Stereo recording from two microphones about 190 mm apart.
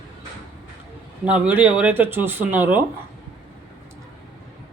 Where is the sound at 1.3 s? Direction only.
5° right (ahead or behind).